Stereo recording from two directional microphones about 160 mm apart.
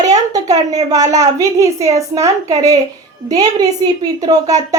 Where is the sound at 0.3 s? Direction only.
25° right (ahead or behind).